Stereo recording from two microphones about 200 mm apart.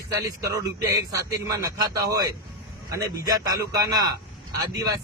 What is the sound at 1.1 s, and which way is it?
A man's voice, 20° right (ahead or behind).